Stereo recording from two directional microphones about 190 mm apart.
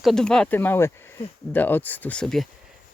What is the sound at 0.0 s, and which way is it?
Speech, centre (ahead or behind).